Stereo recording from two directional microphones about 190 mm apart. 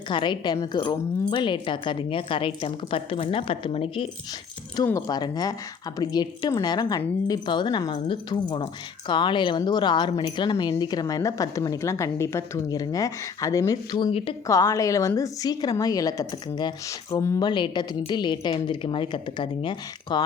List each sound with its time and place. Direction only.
0.1 s a woman's voice: 25° left (ahead or behind)
4.8 s a woman's voice: 20° left (ahead or behind)
14.4 s a woman's voice: 15° left (ahead or behind)